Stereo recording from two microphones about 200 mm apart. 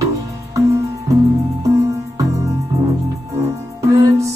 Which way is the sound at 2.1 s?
15° right (ahead or behind).